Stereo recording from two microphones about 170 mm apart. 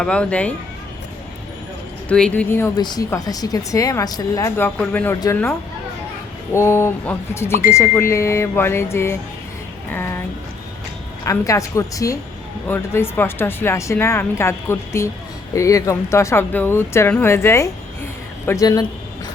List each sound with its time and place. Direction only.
0.0 s speech: 5° left (ahead or behind)
2.0 s speech: 5° left (ahead or behind)
11.3 s speech: 20° left (ahead or behind)